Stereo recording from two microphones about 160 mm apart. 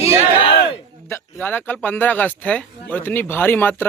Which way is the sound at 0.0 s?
40° left (ahead or behind).